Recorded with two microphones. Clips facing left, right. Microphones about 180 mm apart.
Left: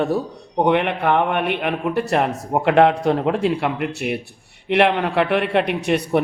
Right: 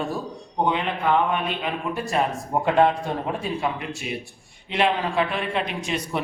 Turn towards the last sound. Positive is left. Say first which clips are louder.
# left 8 dB
turn(degrees=60)  # may be behind; listen again after turning